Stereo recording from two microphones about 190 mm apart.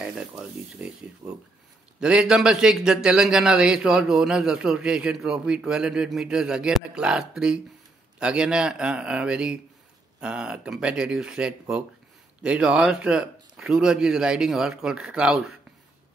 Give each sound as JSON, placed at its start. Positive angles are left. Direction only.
{"t": 0.0, "sound": "a man's voice", "side_deg": -5}
{"t": 1.2, "sound": "speech", "side_deg": -15}
{"t": 2.0, "sound": "a man's voice", "side_deg": -5}